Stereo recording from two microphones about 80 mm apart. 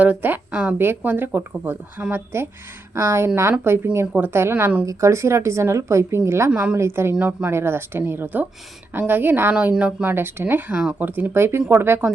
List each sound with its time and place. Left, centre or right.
0.0 s speech: right
4.0 s speech: right
7.2 s speech: right
7.5 s speech: right
10.1 s speech: right
10.8 s speech: centre
11.0 s speech: right